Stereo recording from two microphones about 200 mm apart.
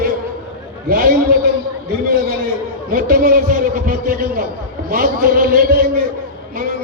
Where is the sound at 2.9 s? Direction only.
45° right (ahead or behind).